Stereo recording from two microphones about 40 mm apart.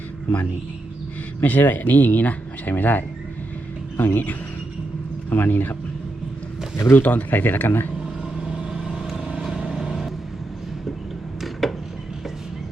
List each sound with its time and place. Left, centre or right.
1.4 s speech: left
3.9 s speech: left
5.3 s speech: left
6.9 s speech: left
8.7 s vehicle: centre
9.5 s vehicle: right
11.3 s a sound: centre